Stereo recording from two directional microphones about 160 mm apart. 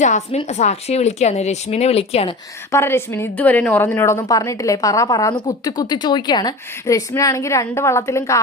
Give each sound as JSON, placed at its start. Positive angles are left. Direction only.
{"t": 0.0, "sound": "a woman's voice", "side_deg": 45}
{"t": 2.7, "sound": "a woman's voice", "side_deg": 15}